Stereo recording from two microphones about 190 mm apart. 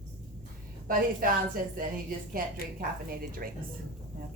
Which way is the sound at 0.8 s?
50° right (ahead or behind).